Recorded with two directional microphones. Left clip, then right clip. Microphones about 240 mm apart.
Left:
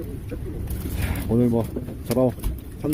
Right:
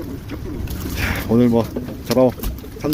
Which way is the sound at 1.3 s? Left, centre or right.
Centre.